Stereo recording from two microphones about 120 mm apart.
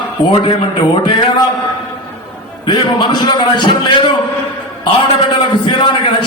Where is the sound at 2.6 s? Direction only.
45° left (ahead or behind).